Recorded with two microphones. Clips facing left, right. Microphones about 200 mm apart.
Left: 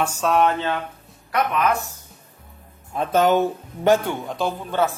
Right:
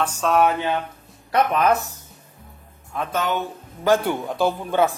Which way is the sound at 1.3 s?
35° right (ahead or behind).